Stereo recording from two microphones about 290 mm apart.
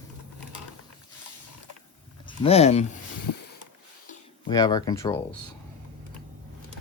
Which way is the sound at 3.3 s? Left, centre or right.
Left.